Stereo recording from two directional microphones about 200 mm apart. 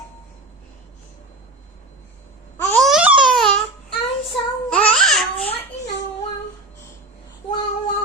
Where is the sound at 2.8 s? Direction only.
5° right (ahead or behind).